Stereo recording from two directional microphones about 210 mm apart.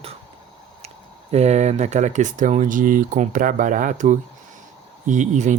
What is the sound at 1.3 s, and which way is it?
Speech, 30° right (ahead or behind).